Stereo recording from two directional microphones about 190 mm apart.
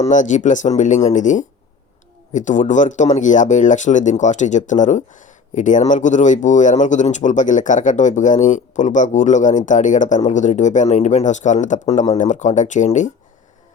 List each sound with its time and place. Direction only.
0.0 s speech: 40° left (ahead or behind)